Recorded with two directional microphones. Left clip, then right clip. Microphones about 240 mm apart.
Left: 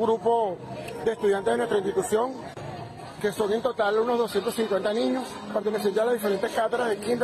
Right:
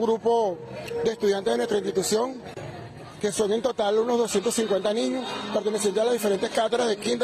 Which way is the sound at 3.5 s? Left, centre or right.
Right.